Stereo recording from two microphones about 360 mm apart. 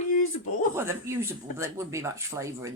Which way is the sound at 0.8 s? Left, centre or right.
Centre.